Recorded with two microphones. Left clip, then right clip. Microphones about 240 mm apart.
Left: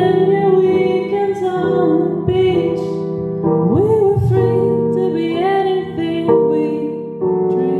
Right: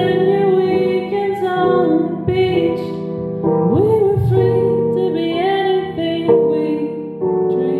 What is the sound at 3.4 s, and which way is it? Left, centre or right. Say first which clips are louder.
Music: even; left.